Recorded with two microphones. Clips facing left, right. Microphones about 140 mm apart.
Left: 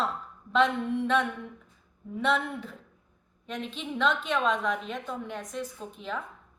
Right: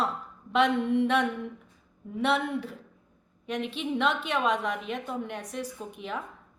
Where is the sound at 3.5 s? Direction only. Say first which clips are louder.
Right 4 dB; 65° right (ahead or behind).